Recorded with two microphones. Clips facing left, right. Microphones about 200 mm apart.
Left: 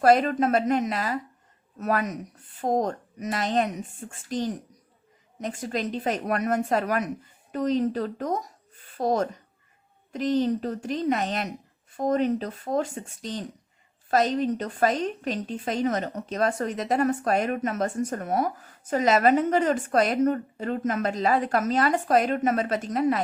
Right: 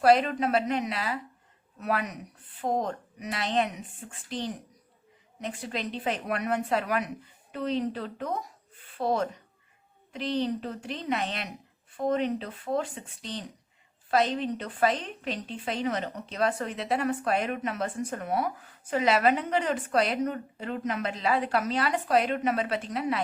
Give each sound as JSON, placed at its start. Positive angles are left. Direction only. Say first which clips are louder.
{"t": 0.0, "sound": "a woman's voice", "louder": "left 2 dB", "side_deg": 45}